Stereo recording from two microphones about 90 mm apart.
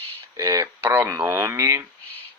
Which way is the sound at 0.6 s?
30° right (ahead or behind).